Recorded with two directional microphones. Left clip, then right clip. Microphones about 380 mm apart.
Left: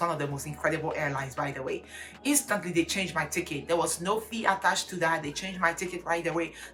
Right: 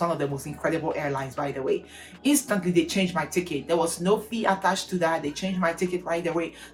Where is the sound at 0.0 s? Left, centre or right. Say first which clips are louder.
Right 3 dB; centre.